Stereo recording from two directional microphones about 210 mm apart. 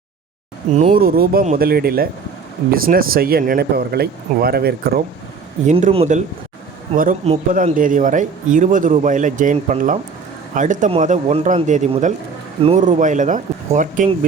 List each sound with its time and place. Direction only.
0.8 s speech: 40° right (ahead or behind)
5.6 s speech: 30° right (ahead or behind)